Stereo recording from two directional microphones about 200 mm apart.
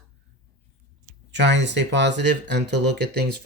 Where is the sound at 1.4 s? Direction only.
60° right (ahead or behind).